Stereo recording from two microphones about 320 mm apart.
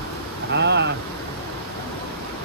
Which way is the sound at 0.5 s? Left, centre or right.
Right.